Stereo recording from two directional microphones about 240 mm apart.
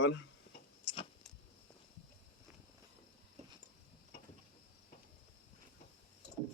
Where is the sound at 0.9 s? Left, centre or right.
Left.